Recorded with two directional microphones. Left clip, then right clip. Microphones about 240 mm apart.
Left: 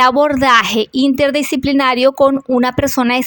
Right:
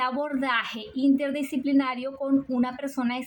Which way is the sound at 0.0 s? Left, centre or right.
Left.